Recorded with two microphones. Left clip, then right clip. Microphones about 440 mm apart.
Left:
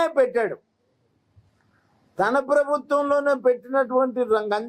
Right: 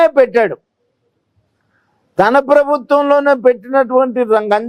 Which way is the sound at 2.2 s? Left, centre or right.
Right.